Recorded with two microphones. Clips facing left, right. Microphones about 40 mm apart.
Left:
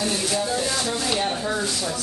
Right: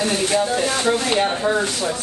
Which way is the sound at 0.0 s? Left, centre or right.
Right.